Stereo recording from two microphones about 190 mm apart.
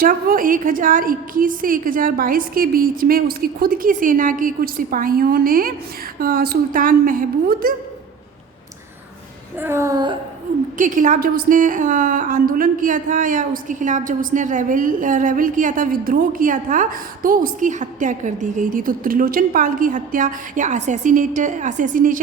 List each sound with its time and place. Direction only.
0.0 s a woman's voice: 50° right (ahead or behind)
9.6 s a sound: 15° right (ahead or behind)
10.8 s a woman's voice: 45° right (ahead or behind)